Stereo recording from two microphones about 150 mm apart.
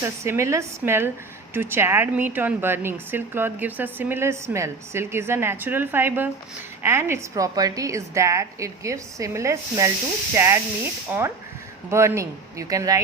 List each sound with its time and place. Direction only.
0.0 s a woman's voice: 20° right (ahead or behind)